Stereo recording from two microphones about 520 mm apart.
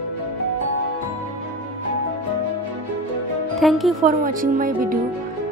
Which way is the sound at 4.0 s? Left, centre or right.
Centre.